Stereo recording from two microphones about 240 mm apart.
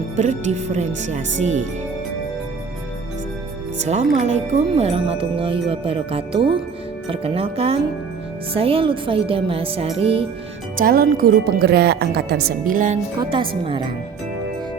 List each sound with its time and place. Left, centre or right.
0.2 s speech: right
3.8 s speech: right
10.8 s speech: right
13.1 s speech: right